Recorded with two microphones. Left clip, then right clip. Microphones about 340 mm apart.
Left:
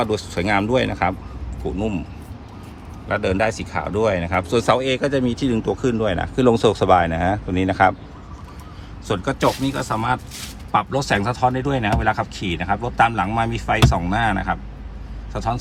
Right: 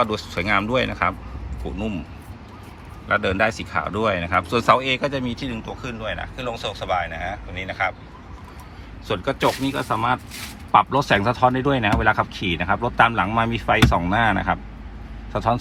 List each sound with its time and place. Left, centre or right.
0.0 s speech: centre
3.1 s speech: centre
7.1 s speech: left
7.5 s speech: centre
9.0 s a man's voice: centre